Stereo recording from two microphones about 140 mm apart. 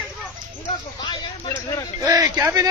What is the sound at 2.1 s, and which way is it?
Speech, 25° right (ahead or behind).